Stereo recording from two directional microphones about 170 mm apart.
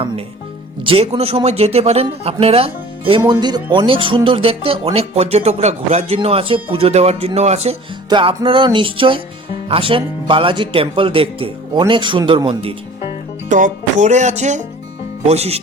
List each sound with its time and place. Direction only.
0.9 s speech: 35° right (ahead or behind)
8.4 s music: 30° right (ahead or behind)
9.6 s speech: 30° right (ahead or behind)
11.9 s music: 30° right (ahead or behind)
13.5 s music: 45° right (ahead or behind)
15.3 s speech: 35° right (ahead or behind)